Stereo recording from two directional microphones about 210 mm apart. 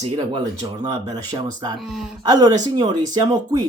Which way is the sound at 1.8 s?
Centre (ahead or behind).